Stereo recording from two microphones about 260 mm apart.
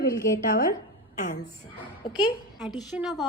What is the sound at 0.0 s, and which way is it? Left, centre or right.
A woman's voice, left.